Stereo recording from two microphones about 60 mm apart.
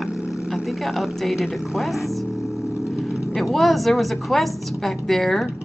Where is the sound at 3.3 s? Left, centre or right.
Centre.